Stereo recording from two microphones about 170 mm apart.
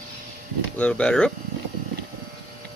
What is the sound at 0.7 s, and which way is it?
Speech, 10° left (ahead or behind).